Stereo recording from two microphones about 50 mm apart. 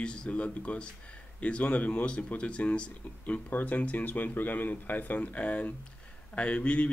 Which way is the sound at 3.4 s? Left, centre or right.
Left.